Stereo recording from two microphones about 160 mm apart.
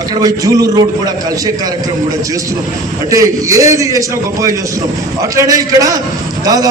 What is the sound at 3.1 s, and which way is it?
A man's voice, 20° right (ahead or behind).